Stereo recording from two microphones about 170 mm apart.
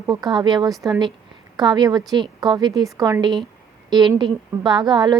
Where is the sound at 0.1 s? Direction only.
25° right (ahead or behind).